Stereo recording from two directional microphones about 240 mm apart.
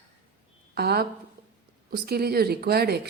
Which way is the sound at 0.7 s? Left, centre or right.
Right.